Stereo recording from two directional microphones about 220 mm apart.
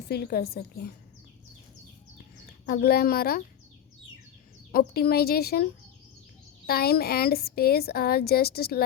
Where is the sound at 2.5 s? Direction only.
45° left (ahead or behind).